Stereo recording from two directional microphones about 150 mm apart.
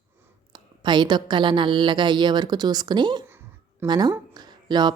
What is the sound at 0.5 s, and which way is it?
A woman's voice, 30° right (ahead or behind).